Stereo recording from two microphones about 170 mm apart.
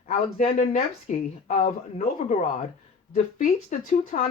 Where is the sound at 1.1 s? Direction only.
45° left (ahead or behind).